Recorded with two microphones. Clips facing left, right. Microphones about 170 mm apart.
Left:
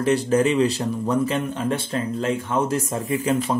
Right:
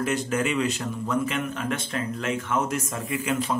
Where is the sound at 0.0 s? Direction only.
35° left (ahead or behind).